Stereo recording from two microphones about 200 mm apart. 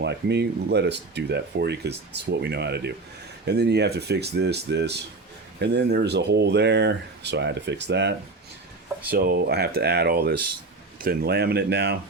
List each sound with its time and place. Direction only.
0.0 s speech: 60° right (ahead or behind)